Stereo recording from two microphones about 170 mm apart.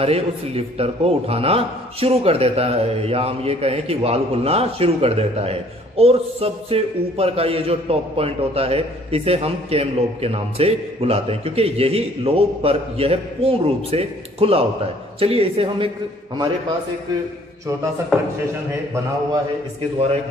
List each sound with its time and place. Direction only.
0.0 s a man's voice: 35° right (ahead or behind)